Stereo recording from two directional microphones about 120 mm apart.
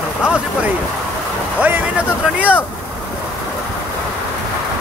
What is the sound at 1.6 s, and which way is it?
Speech, 15° right (ahead or behind).